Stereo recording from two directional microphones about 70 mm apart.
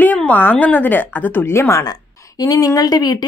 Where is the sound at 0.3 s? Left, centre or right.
Left.